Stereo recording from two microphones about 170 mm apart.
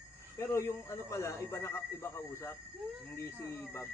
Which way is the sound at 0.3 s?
15° left (ahead or behind).